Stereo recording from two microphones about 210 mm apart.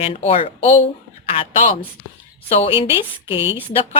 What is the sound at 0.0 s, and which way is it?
A woman's voice, 25° left (ahead or behind).